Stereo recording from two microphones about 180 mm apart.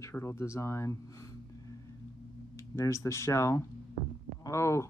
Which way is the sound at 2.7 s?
15° left (ahead or behind).